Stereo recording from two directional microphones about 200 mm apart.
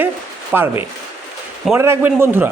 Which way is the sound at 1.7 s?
15° right (ahead or behind).